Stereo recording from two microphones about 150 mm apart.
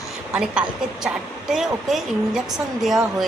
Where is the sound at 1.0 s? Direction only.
5° right (ahead or behind).